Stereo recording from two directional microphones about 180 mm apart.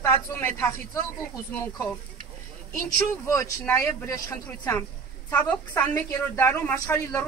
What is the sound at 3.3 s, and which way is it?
Speech, 15° left (ahead or behind).